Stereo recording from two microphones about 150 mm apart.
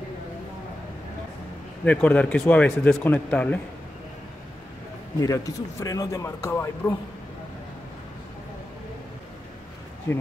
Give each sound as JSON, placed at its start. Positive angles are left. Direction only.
{"t": 1.9, "sound": "a man's voice", "side_deg": 10}
{"t": 5.2, "sound": "a man's voice", "side_deg": 20}
{"t": 10.1, "sound": "a man's voice", "side_deg": 20}